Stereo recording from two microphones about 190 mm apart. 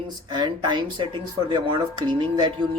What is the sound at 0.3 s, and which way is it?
Speech, 25° right (ahead or behind).